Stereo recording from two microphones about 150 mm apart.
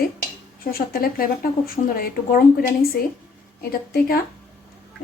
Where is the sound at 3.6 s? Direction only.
90° left.